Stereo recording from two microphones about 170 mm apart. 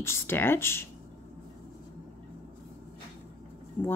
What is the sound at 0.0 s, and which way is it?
Speech, 15° left (ahead or behind).